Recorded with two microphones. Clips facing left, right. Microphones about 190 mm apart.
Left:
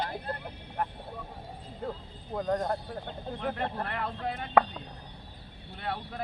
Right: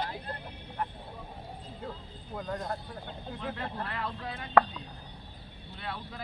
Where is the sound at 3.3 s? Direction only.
55° left (ahead or behind).